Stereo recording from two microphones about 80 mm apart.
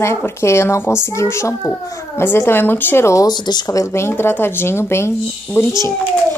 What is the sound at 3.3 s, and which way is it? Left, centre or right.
Speech, left.